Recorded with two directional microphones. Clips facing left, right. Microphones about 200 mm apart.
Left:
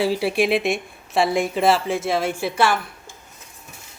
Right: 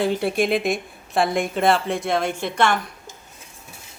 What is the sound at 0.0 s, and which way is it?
A woman's voice, 5° left (ahead or behind).